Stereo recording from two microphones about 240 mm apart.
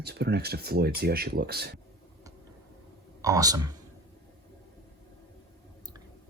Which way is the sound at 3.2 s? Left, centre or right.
Centre.